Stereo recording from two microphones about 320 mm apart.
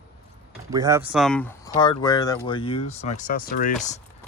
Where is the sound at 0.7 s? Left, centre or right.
Centre.